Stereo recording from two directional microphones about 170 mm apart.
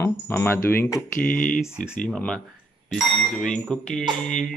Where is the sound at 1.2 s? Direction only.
55° left (ahead or behind).